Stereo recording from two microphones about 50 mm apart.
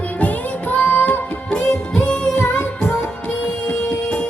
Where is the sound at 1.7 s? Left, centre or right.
Centre.